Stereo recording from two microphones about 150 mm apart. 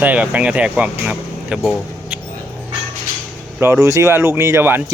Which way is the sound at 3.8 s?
20° right (ahead or behind).